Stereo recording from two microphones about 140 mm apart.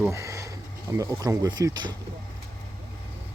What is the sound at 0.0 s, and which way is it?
Speech, 20° right (ahead or behind).